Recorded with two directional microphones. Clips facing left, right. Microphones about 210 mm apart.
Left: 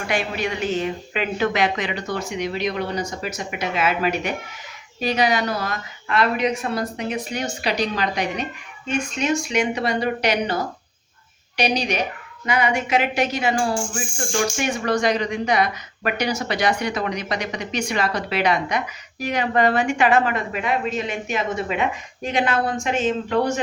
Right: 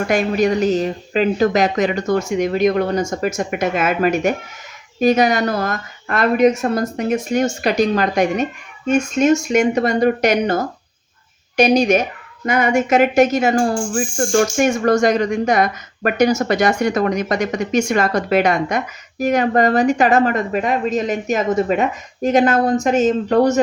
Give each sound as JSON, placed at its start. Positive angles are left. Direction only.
{"t": 0.1, "sound": "speech", "side_deg": -45}